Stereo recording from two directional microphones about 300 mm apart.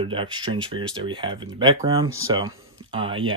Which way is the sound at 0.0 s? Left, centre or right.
Centre.